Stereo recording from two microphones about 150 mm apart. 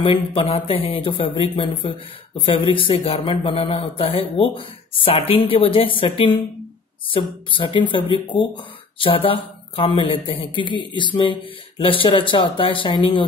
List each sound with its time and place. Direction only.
0.0 s speech: 35° left (ahead or behind)